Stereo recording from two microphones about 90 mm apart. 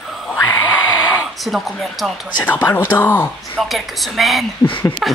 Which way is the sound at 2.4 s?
20° left (ahead or behind).